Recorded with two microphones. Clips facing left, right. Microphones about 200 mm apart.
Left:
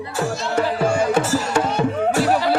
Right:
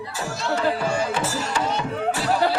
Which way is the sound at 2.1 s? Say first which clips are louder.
Left 4 dB; 55° left (ahead or behind).